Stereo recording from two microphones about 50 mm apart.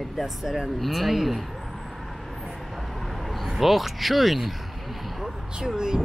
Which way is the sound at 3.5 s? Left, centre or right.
Centre.